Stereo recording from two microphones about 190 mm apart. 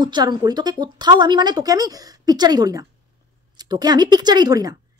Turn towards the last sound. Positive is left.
turn(degrees=-20)  # may be behind; listen again after turning